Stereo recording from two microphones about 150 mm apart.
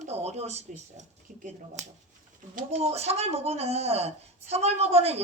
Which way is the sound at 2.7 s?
45° right (ahead or behind).